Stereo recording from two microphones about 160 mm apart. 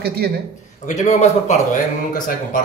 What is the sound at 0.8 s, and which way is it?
Speech, 50° left (ahead or behind).